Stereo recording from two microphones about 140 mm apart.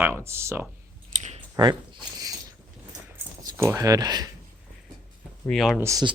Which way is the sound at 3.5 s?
15° right (ahead or behind).